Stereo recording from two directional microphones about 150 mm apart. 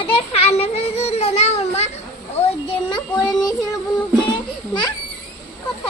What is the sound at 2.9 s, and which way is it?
Child singing, 25° left (ahead or behind).